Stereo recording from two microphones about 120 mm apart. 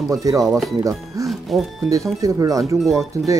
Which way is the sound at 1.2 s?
Centre (ahead or behind).